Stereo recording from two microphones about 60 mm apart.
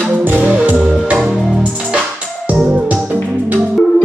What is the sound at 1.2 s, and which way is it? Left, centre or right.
Music, centre.